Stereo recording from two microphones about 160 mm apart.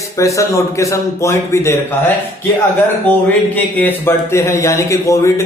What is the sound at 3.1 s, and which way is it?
Speech, 10° left (ahead or behind).